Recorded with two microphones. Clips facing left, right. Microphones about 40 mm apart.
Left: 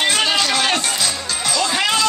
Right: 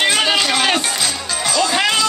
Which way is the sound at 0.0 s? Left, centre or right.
Centre.